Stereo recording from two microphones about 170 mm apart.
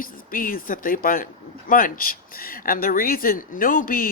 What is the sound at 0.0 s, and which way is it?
Speech, 55° left (ahead or behind).